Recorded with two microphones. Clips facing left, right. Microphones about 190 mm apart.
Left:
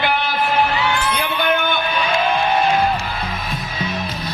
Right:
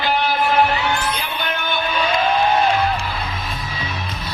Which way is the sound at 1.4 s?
55° left (ahead or behind).